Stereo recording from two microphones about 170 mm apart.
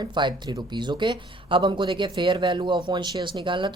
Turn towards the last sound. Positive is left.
turn(degrees=-30)  # may be behind; listen again after turning